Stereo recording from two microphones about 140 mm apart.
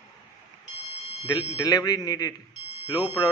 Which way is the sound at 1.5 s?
25° left (ahead or behind).